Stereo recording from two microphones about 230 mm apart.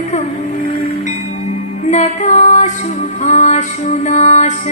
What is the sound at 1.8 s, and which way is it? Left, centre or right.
Music, left.